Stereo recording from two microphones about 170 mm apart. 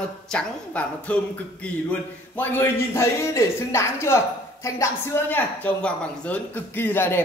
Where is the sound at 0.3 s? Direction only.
5° left (ahead or behind).